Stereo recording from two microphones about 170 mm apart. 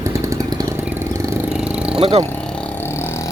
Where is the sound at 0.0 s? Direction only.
20° right (ahead or behind).